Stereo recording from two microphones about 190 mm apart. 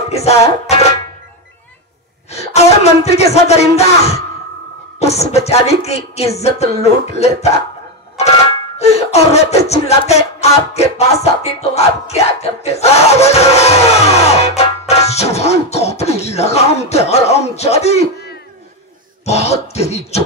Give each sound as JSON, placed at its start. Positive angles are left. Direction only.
{"t": 0.1, "sound": "speech", "side_deg": 35}
{"t": 2.3, "sound": "speech", "side_deg": 35}
{"t": 8.7, "sound": "speech", "side_deg": 35}
{"t": 19.2, "sound": "speech", "side_deg": 35}